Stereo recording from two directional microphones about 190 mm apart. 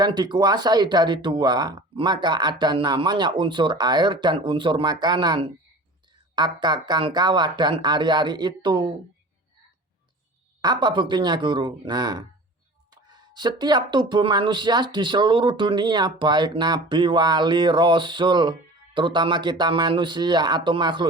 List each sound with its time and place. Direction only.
0.0 s speech: 20° right (ahead or behind)
10.6 s speech: 20° right (ahead or behind)